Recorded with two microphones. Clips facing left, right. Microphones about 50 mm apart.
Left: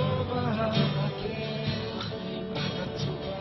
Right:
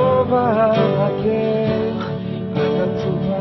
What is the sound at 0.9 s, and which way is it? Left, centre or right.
Music, right.